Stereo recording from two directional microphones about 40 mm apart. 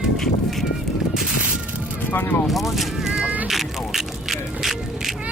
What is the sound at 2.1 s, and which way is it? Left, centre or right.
Speech, left.